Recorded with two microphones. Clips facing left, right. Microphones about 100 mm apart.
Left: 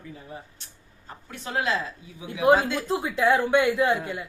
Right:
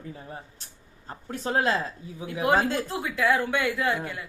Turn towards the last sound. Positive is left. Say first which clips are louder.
# left 4 dB
turn(degrees=20)  # may be behind; listen again after turning